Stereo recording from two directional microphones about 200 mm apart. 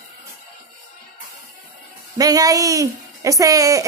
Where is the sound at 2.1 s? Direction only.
20° right (ahead or behind).